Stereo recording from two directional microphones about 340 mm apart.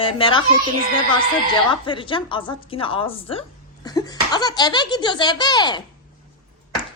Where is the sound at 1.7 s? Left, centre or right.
Centre.